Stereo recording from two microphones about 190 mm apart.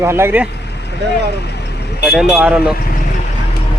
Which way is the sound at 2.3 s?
5° right (ahead or behind).